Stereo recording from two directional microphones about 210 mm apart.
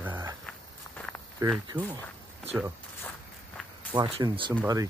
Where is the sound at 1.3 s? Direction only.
20° right (ahead or behind).